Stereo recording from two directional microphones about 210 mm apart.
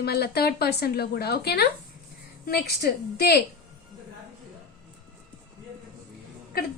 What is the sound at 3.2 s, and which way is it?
Speech, 50° left (ahead or behind).